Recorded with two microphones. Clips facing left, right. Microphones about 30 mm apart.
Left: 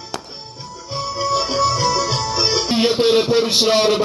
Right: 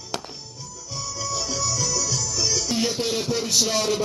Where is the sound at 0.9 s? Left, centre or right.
Left.